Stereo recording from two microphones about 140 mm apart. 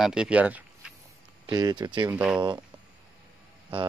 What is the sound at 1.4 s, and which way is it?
Speech, 30° right (ahead or behind).